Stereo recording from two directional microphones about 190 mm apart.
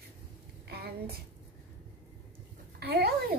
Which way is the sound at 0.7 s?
55° right (ahead or behind).